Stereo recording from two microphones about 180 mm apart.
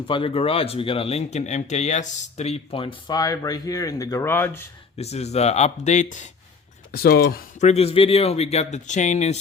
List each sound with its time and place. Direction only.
0.1 s speech: 30° left (ahead or behind); by 4.6 s 10° left (ahead or behind)
4.9 s speech: 35° left (ahead or behind)
6.9 s speech: 55° left (ahead or behind)
7.6 s speech: 35° left (ahead or behind)